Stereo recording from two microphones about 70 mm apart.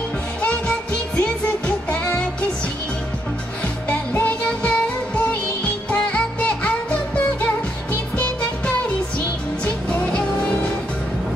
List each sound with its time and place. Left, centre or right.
0.4 s music: centre
3.9 s music: left
9.8 s music: centre